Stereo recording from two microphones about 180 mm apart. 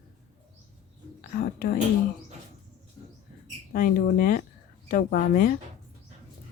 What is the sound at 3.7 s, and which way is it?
A woman's voice, 55° left (ahead or behind).